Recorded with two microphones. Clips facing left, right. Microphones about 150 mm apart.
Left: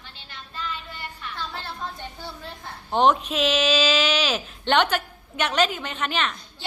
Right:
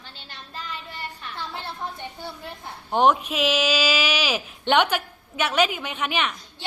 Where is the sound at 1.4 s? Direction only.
20° right (ahead or behind).